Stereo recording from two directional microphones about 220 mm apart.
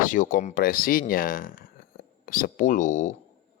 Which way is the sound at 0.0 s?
35° left (ahead or behind).